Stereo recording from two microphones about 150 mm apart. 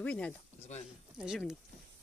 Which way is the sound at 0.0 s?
10° left (ahead or behind).